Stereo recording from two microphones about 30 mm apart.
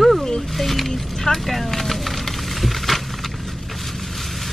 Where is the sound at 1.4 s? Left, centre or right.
Centre.